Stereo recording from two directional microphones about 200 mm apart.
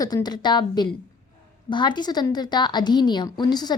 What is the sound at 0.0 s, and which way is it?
A woman's voice, 20° left (ahead or behind).